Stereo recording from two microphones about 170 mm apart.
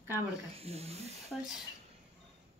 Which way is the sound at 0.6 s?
35° right (ahead or behind).